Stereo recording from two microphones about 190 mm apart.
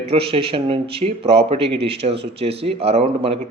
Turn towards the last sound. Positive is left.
turn(degrees=-30)  # may be behind; listen again after turning